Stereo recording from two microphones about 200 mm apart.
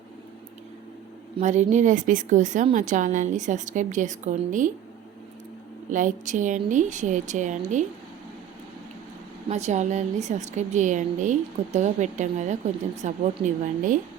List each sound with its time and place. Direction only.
1.4 s a woman's voice: 35° right (ahead or behind)
5.9 s a woman's voice: 40° right (ahead or behind)
9.5 s a woman's voice: 35° right (ahead or behind)